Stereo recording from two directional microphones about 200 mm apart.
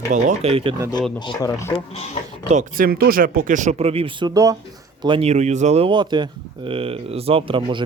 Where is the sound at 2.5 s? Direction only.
40° right (ahead or behind).